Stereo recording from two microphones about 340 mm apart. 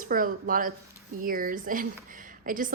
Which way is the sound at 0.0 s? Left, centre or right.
Right.